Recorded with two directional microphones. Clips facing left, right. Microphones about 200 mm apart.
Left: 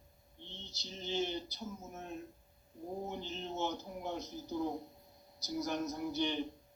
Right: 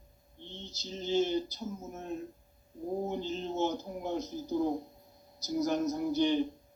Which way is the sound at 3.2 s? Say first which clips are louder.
Right 7 dB; 45° right (ahead or behind).